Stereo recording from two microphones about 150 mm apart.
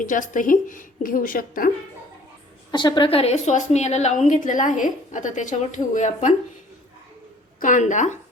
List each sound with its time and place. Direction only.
0.0 s a woman's voice: 60° left (ahead or behind)
2.7 s a woman's voice: 30° left (ahead or behind); by 6.3 s 50° left (ahead or behind)
7.6 s a woman's voice: 60° left (ahead or behind)